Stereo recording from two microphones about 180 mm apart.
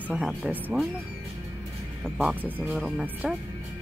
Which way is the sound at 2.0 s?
5° right (ahead or behind).